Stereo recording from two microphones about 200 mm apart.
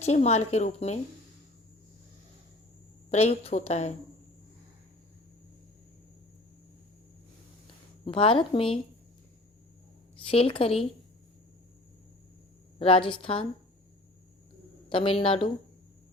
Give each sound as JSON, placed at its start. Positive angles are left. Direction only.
{"t": 0.0, "sound": "speech", "side_deg": 35}
{"t": 3.1, "sound": "speech", "side_deg": 30}
{"t": 8.0, "sound": "speech", "side_deg": 25}
{"t": 10.3, "sound": "speech", "side_deg": 30}
{"t": 12.8, "sound": "speech", "side_deg": 25}
{"t": 14.8, "sound": "speech", "side_deg": 25}